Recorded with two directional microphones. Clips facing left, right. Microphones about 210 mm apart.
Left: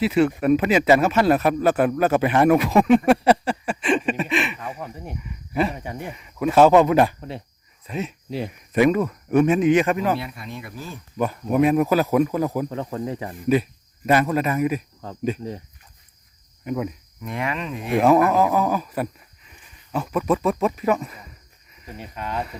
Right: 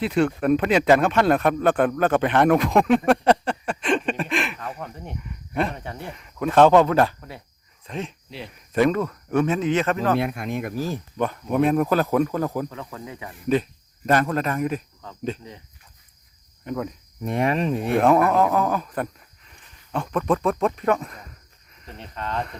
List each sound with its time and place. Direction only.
0.0 s speech: 5° left (ahead or behind)
7.2 s speech: 25° left (ahead or behind)
7.9 s speech: 5° left (ahead or behind)
10.2 s speech: 50° right (ahead or behind)
11.2 s speech: 5° left (ahead or behind)
12.6 s speech: 30° left (ahead or behind)
14.1 s speech: 10° left (ahead or behind)
16.6 s speech: 10° left (ahead or behind)
17.2 s speech: 40° right (ahead or behind)
17.8 s speech: centre (ahead or behind)